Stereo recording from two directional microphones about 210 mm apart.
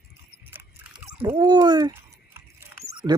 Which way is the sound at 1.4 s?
20° right (ahead or behind).